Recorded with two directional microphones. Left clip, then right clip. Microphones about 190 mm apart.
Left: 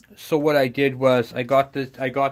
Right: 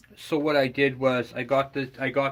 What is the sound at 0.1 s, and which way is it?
Speech, 35° left (ahead or behind).